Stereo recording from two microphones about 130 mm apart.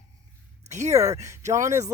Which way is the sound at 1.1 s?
25° right (ahead or behind).